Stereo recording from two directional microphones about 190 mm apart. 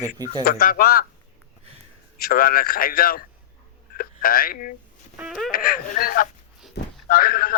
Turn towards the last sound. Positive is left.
turn(degrees=50)  # may be behind; listen again after turning